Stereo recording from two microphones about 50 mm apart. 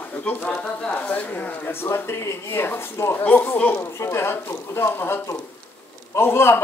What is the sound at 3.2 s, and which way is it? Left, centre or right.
Speech, left.